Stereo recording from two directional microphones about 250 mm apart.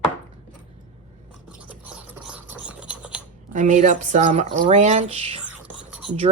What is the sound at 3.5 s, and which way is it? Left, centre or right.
Speech, right.